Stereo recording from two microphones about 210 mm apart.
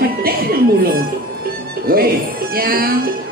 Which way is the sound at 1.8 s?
45° right (ahead or behind).